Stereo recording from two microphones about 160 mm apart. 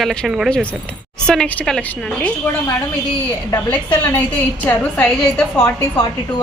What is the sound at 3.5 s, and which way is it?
A woman's voice, 15° left (ahead or behind).